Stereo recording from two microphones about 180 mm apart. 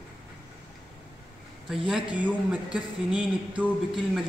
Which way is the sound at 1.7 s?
5° right (ahead or behind).